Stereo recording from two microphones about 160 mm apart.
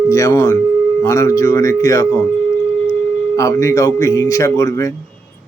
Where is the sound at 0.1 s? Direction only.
20° left (ahead or behind).